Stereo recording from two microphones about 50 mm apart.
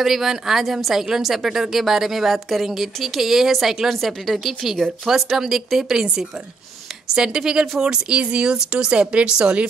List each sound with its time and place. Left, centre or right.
0.0 s speech: centre
7.2 s speech: centre
7.9 s speech: centre